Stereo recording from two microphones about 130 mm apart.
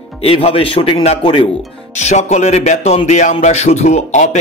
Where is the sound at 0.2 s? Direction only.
50° left (ahead or behind).